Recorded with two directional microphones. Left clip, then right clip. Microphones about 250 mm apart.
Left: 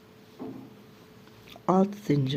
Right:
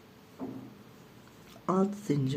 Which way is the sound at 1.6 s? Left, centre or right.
Left.